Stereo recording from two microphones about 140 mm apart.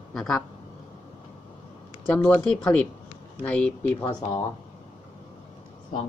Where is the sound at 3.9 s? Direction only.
35° left (ahead or behind).